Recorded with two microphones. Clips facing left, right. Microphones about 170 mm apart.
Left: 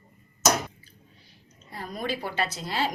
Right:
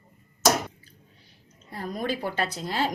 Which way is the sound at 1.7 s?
45° right (ahead or behind).